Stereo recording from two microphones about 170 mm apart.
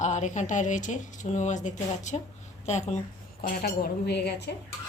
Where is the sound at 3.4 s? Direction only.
65° left (ahead or behind).